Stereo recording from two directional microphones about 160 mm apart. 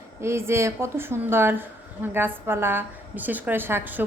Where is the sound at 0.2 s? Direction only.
15° right (ahead or behind).